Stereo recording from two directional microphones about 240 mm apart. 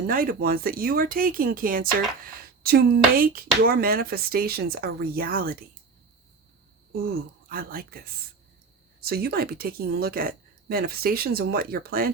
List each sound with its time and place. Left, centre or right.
0.1 s speech: right
6.9 s speech: right